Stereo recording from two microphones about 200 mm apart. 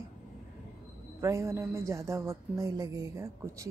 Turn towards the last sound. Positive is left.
turn(degrees=-15)  # may be behind; listen again after turning